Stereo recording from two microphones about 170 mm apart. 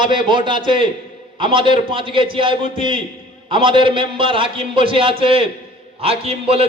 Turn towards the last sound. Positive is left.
turn(degrees=-35)  # may be behind; listen again after turning